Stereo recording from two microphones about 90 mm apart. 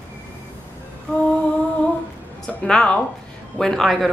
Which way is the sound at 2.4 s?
10° left (ahead or behind).